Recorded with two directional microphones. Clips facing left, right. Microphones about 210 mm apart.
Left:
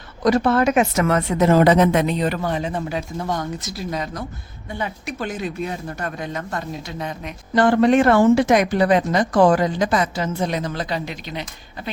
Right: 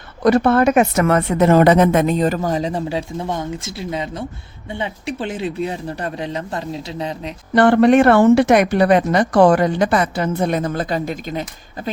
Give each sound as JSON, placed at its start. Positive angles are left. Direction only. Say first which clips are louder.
{"t": 0.2, "sound": "a woman's voice", "louder": "right 3 dB", "side_deg": -60}
{"t": 7.5, "sound": "speech", "louder": "right 3 dB", "side_deg": -65}